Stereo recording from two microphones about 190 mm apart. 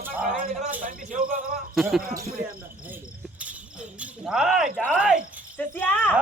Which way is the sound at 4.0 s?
5° right (ahead or behind).